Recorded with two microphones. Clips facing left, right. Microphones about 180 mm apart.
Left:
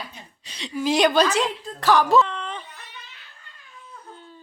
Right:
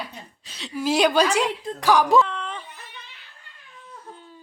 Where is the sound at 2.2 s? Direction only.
5° right (ahead or behind).